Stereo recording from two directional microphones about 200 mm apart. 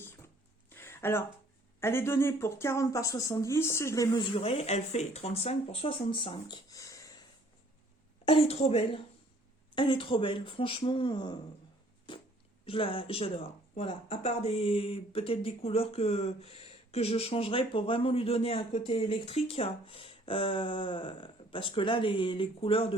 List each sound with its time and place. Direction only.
0.7 s a sound: 10° left (ahead or behind)
1.8 s speech: 10° left (ahead or behind)
4.4 s speech: 30° left (ahead or behind)
8.2 s speech: 30° left (ahead or behind)
12.1 s a sound: 25° left (ahead or behind)
12.6 s speech: 25° left (ahead or behind)